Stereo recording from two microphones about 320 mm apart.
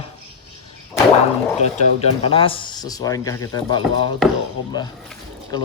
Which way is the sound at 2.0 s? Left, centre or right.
Centre.